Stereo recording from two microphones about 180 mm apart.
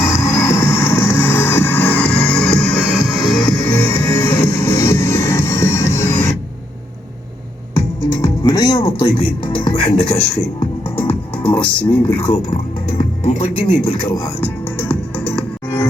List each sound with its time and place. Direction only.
0.0 s music: 15° left (ahead or behind)
3.9 s music: 15° left (ahead or behind)
8.2 s music: 20° left (ahead or behind)
10.6 s music: 10° left (ahead or behind)
13.0 s speech: 35° left (ahead or behind)
14.4 s music: 10° left (ahead or behind)